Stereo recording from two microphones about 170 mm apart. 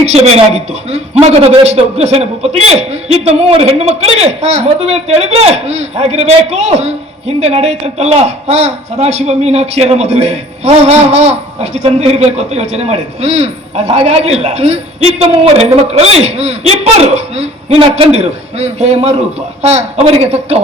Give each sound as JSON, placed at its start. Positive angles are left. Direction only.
{"t": 0.0, "sound": "a man's voice", "side_deg": -40}